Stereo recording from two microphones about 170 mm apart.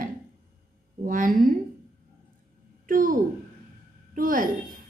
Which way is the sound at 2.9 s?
55° right (ahead or behind).